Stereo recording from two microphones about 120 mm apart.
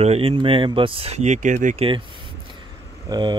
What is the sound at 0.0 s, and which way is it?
Speech, 55° right (ahead or behind).